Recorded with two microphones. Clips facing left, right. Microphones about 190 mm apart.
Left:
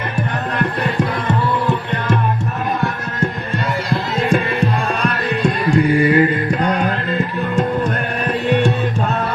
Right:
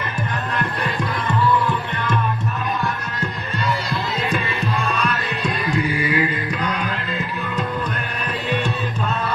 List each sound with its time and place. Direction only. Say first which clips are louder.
1.6 s music: left 4 dB; 40° left (ahead or behind)
4.2 s music: left 10 dB; 45° left (ahead or behind)